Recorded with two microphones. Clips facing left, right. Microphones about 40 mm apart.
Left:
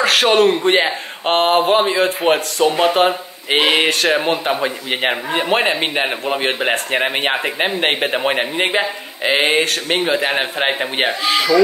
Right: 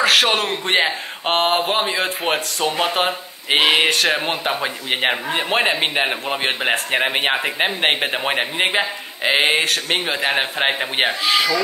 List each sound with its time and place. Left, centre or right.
0.0 s speech: centre